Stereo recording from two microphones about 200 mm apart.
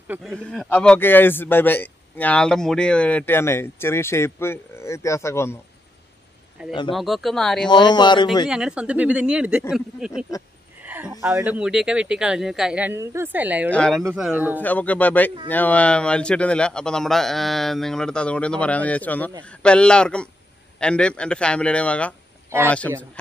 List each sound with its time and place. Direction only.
0.1 s speech: centre (ahead or behind)
6.9 s speech: centre (ahead or behind)
7.7 s a man's voice: 20° left (ahead or behind)
8.5 s speech: 5° right (ahead or behind)
13.7 s speech: 5° left (ahead or behind)
14.6 s speech: 10° left (ahead or behind)